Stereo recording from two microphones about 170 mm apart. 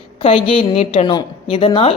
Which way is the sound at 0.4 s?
35° left (ahead or behind).